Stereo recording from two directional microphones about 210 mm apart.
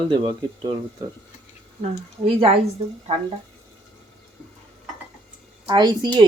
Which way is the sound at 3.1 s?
30° right (ahead or behind).